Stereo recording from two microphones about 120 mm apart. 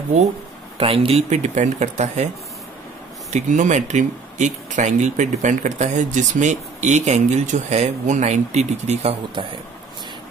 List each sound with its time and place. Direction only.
0.1 s speech: 70° right (ahead or behind)
0.7 s speech: 50° right (ahead or behind)
1.3 s speech: 75° right (ahead or behind)
3.3 s speech: 80° right; by 9.1 s 65° right (ahead or behind)